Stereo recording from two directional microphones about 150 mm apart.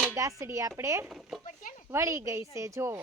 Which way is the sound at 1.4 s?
55° left (ahead or behind).